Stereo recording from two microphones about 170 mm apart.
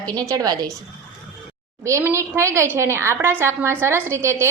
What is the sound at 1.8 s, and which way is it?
A woman's voice, 15° right (ahead or behind).